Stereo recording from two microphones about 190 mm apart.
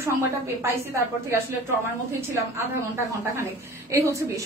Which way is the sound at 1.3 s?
15° right (ahead or behind).